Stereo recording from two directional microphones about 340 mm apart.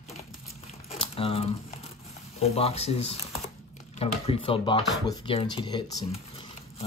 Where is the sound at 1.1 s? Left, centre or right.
Centre.